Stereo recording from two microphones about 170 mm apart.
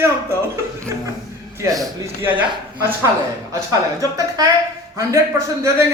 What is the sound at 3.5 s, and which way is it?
A man's voice, 20° right (ahead or behind).